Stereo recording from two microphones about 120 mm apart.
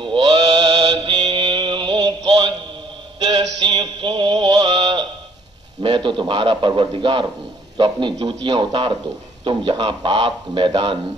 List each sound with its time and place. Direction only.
0.0 s mantra: 40° right (ahead or behind)
3.2 s a sound: 40° right (ahead or behind)
5.8 s a man's voice: 45° right (ahead or behind)